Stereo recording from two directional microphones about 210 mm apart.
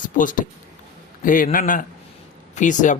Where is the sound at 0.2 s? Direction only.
40° left (ahead or behind).